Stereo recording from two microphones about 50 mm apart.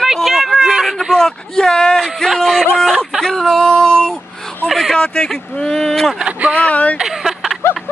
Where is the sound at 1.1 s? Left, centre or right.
Centre.